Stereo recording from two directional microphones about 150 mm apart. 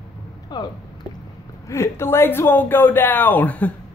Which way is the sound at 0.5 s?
25° left (ahead or behind).